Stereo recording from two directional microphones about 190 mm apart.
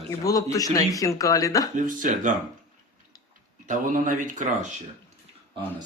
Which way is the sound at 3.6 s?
45° right (ahead or behind).